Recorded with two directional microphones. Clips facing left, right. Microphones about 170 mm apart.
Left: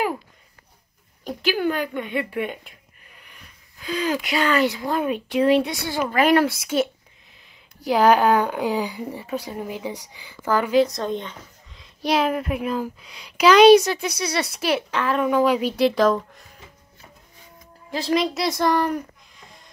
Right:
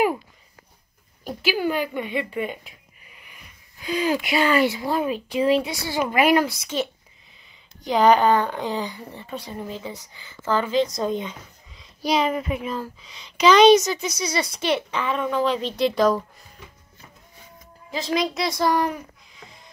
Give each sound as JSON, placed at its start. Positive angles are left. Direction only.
{"t": 1.2, "sound": "a woman's voice", "side_deg": -5}
{"t": 5.9, "sound": "a woman's voice", "side_deg": -10}
{"t": 6.3, "sound": "a woman's voice", "side_deg": 5}
{"t": 11.0, "sound": "a woman's voice", "side_deg": -5}
{"t": 17.9, "sound": "a woman's voice", "side_deg": 0}